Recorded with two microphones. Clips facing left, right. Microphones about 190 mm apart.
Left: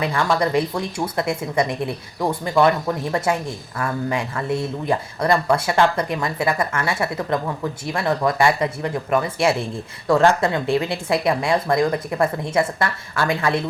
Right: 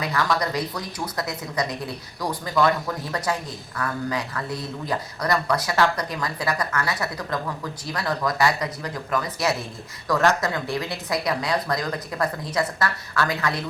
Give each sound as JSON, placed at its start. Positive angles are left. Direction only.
{"t": 0.0, "sound": "speech", "side_deg": 25}